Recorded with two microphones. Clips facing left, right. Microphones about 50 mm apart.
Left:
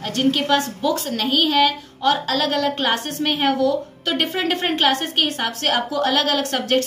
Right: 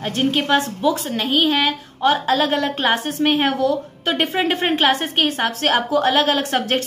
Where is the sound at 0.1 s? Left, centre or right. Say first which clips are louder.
Even; right.